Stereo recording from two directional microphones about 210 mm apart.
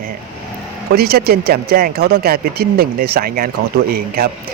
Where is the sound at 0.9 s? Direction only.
50° right (ahead or behind).